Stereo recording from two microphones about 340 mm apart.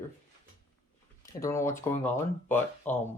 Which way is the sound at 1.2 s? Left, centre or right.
Centre.